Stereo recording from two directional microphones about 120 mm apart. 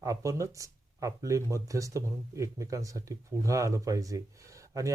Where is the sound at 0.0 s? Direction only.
25° right (ahead or behind).